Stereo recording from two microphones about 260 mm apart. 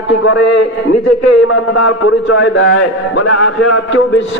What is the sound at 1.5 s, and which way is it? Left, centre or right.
A man's voice, left.